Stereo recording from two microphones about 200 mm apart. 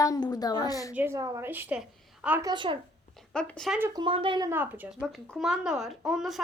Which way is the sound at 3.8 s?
15° right (ahead or behind).